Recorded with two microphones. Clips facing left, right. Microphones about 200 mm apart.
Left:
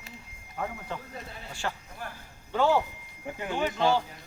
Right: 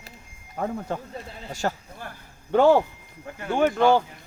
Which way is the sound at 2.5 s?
55° right (ahead or behind).